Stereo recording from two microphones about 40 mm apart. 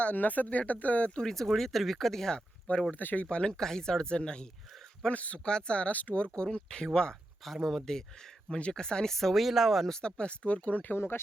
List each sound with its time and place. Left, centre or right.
0.0 s speech: left
1.2 s speech: centre
2.3 s speech: left
2.9 s speech: left
3.2 s speech: left
5.1 s speech: left
5.5 s speech: left
5.9 s speech: left
6.1 s speech: left
7.4 s speech: centre
8.4 s speech: left
9.1 s speech: centre
10.0 s speech: left
10.9 s speech: left